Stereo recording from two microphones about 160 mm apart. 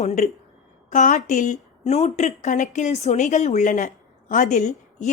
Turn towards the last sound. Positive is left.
turn(degrees=50)  # may be behind; listen again after turning